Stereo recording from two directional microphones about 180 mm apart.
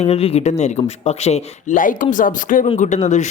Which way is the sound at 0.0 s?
35° left (ahead or behind).